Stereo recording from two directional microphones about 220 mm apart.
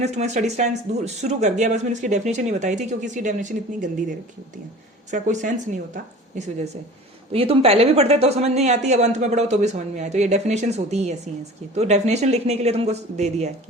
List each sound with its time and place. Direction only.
0.0 s speech: 30° right (ahead or behind)
5.1 s speech: 35° right (ahead or behind)